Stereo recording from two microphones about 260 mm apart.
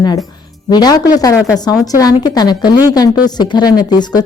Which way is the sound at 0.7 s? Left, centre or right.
Centre.